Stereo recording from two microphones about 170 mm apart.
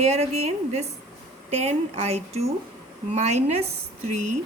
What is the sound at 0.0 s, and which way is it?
A woman's voice, 40° right (ahead or behind).